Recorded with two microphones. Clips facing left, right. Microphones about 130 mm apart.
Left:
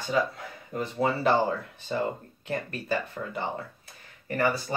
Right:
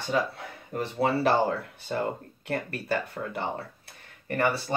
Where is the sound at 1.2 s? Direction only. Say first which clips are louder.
Left 1 dB; 65° right (ahead or behind).